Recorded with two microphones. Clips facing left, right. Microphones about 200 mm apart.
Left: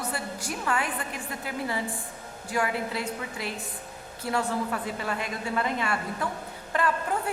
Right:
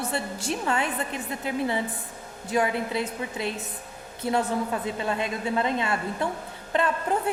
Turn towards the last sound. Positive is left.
turn(degrees=-20)  # may be behind; listen again after turning